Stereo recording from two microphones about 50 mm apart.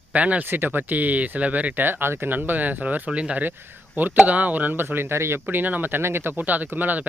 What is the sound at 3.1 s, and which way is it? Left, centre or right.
Speech, right.